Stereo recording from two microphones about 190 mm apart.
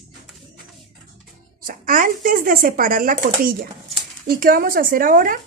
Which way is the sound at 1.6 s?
45° right (ahead or behind).